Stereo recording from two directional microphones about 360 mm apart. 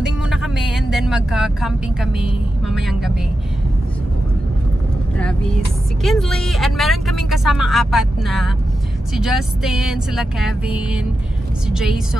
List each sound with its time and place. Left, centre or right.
0.3 s speech: centre
6.0 s speech: centre